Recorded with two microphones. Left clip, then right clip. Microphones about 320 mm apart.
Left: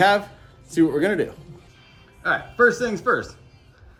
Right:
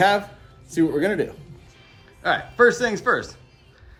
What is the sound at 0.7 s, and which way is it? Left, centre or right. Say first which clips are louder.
A man's voice: left 1 dB; centre.